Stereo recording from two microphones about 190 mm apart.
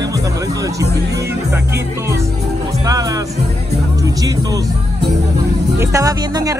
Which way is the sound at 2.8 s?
20° right (ahead or behind).